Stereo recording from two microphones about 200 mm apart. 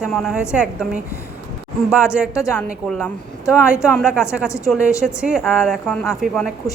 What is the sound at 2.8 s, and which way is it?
A woman's voice, 5° left (ahead or behind).